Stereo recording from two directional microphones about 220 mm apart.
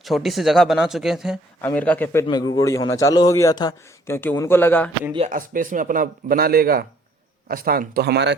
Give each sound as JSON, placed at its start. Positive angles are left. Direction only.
{"t": 0.0, "sound": "a man's voice", "side_deg": 0}
{"t": 2.2, "sound": "a man's voice", "side_deg": 20}
{"t": 5.1, "sound": "a man's voice", "side_deg": -30}